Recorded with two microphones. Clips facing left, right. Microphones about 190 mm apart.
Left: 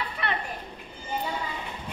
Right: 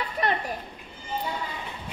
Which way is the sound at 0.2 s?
40° right (ahead or behind).